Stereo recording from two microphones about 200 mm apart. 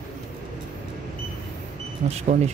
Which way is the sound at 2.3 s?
40° right (ahead or behind).